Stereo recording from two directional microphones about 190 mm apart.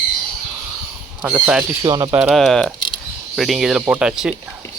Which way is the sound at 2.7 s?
25° left (ahead or behind).